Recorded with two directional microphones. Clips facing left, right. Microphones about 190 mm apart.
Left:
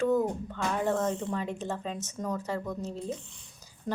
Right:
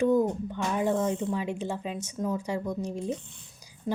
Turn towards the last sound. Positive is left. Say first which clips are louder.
# right 3 dB
turn(degrees=-15)  # may be behind; listen again after turning